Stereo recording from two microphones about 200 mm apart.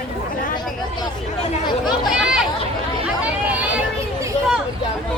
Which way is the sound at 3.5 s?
5° right (ahead or behind).